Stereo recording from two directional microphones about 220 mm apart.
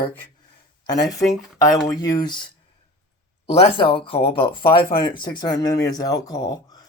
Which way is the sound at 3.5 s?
25° left (ahead or behind).